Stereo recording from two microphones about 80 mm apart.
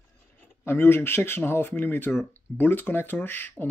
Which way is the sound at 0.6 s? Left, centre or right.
Left.